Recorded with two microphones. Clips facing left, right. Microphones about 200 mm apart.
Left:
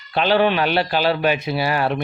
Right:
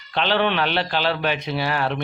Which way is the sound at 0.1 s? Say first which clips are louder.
Left 4 dB; 10° left (ahead or behind).